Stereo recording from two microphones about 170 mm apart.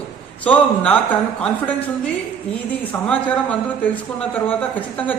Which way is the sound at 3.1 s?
10° left (ahead or behind).